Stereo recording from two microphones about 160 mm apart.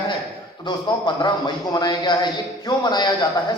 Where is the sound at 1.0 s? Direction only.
30° left (ahead or behind).